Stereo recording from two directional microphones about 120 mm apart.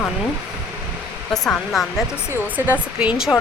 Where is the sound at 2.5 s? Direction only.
10° right (ahead or behind).